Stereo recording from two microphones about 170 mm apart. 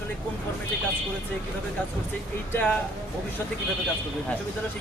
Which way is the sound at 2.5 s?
10° left (ahead or behind).